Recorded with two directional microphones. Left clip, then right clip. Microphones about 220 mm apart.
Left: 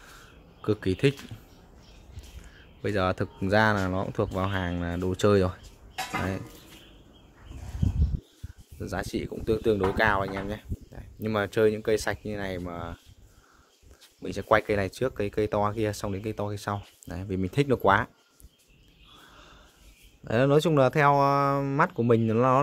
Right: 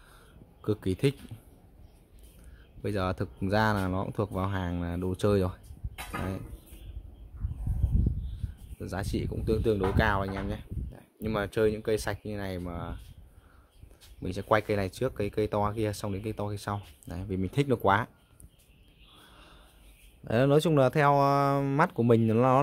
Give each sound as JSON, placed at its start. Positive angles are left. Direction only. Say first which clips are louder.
{"t": 0.6, "sound": "speech", "louder": "left 4 dB", "side_deg": -5}
{"t": 2.8, "sound": "speech", "louder": "left 5 dB", "side_deg": -5}
{"t": 8.7, "sound": "speech", "louder": "left 3 dB", "side_deg": -5}
{"t": 14.2, "sound": "speech", "louder": "left 3 dB", "side_deg": -5}
{"t": 20.2, "sound": "speech", "louder": "left 2 dB", "side_deg": -10}